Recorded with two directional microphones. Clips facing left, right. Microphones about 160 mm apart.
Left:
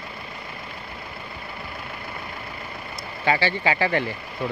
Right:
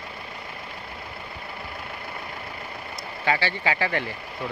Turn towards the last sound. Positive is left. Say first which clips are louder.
# left 3 dB
turn(degrees=25)  # may be behind; listen again after turning